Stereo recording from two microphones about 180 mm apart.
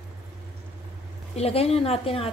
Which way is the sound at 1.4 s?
35° left (ahead or behind).